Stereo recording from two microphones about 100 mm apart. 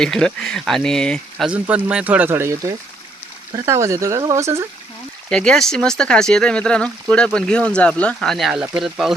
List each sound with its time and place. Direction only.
0.0 s speech: 5° left (ahead or behind)
1.5 s speech: 15° right (ahead or behind); by 4.6 s 30° right (ahead or behind)
5.3 s speech: 10° left (ahead or behind)